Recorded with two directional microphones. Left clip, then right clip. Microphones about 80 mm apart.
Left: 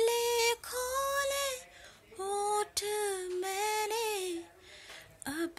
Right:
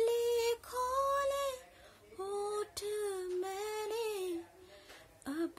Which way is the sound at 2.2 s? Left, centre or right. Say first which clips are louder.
Left 6 dB; right.